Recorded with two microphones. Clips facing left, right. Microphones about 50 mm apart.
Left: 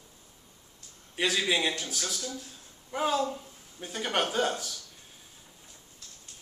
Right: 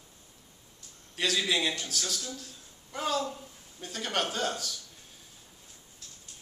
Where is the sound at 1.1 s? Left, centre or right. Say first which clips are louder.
Left 1 dB; centre.